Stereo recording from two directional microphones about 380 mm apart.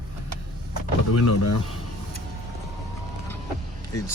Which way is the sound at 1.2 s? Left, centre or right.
Left.